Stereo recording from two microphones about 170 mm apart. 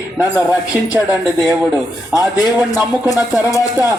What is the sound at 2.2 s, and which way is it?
Speech, 20° left (ahead or behind).